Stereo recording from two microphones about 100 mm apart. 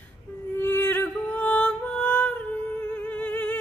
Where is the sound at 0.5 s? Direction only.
25° left (ahead or behind).